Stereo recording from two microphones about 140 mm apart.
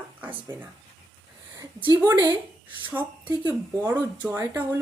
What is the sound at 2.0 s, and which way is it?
Speech, 25° right (ahead or behind).